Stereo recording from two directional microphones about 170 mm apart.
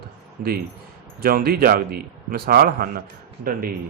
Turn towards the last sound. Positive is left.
turn(degrees=-60)  # may be behind; listen again after turning